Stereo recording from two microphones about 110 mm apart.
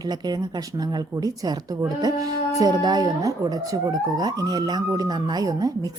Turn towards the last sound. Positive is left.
turn(degrees=-35)  # may be behind; listen again after turning